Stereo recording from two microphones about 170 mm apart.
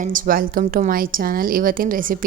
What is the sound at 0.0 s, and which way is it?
A woman's voice, 55° right (ahead or behind).